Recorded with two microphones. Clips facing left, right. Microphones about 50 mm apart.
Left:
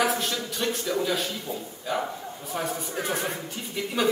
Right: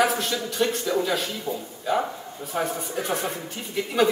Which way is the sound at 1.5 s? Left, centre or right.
Right.